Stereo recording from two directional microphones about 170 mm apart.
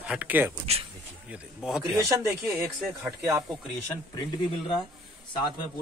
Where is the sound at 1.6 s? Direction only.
5° right (ahead or behind).